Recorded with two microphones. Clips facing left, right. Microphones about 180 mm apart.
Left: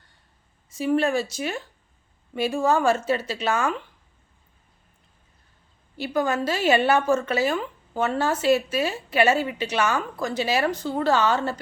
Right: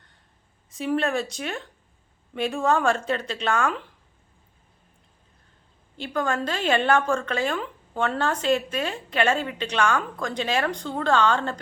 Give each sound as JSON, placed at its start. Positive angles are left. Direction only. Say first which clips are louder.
{"t": 0.7, "sound": "speech", "louder": "left 3 dB", "side_deg": 0}
{"t": 6.0, "sound": "a woman's voice", "louder": "left 2 dB", "side_deg": 5}